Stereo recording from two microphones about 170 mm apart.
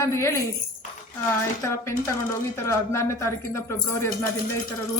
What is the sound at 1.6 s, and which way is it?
Speech, 15° left (ahead or behind).